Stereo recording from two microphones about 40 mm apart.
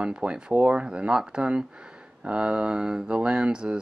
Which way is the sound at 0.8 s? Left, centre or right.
Right.